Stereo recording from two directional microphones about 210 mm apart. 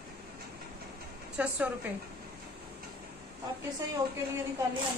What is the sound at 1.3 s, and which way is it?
Speech, 5° right (ahead or behind).